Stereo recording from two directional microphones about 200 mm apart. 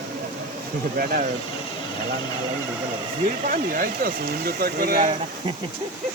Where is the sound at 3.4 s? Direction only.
45° right (ahead or behind).